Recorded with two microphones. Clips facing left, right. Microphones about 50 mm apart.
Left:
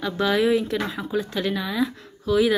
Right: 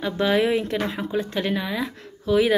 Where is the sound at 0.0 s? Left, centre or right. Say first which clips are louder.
Even; right.